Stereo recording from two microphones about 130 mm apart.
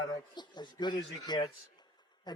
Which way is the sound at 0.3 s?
35° left (ahead or behind).